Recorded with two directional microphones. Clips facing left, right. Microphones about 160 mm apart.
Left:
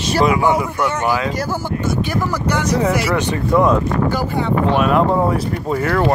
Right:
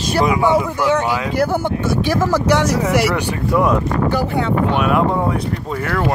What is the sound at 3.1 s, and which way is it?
Speech, 15° right (ahead or behind).